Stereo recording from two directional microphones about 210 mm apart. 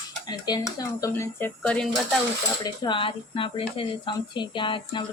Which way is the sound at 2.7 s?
25° left (ahead or behind).